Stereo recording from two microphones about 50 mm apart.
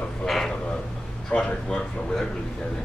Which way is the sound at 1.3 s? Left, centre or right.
Left.